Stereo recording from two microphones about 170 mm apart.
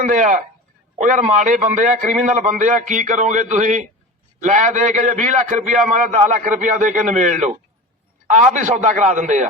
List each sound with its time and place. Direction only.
0.0 s a man's voice: 50° right (ahead or behind)